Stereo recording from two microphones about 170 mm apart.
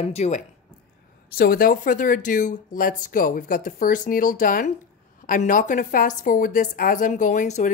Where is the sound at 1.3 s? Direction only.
60° left (ahead or behind).